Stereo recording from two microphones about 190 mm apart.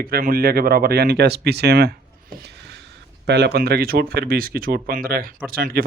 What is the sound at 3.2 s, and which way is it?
Speech, 60° right (ahead or behind).